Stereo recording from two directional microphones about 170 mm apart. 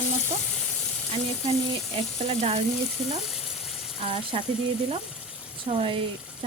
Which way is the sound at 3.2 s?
Centre (ahead or behind).